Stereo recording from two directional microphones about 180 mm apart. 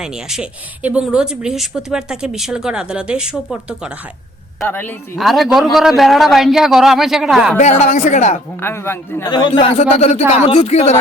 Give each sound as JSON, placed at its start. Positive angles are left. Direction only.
{"t": 0.0, "sound": "speech", "side_deg": -5}
{"t": 4.6, "sound": "a man's voice", "side_deg": 10}
{"t": 5.1, "sound": "speech", "side_deg": 0}
{"t": 7.6, "sound": "speech", "side_deg": 40}
{"t": 8.6, "sound": "a man's voice", "side_deg": 15}
{"t": 9.3, "sound": "speech", "side_deg": 30}